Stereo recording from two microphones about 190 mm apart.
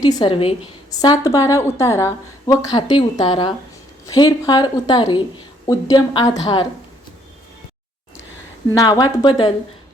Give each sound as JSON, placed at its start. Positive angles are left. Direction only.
{"t": 0.0, "sound": "a woman's voice", "side_deg": 20}
{"t": 8.7, "sound": "a woman's voice", "side_deg": 20}